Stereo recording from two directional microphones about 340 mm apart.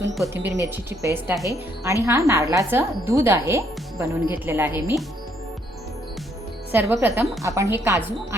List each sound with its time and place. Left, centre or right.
0.3 s speech: right
0.6 s speech: centre
6.7 s speech: centre